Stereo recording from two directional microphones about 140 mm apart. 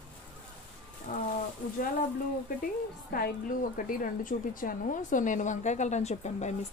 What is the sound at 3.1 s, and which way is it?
A woman's voice, 85° left.